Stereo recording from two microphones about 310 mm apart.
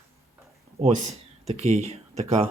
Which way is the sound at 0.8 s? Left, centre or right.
Right.